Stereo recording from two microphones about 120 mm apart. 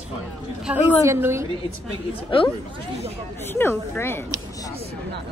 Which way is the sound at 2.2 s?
45° left (ahead or behind).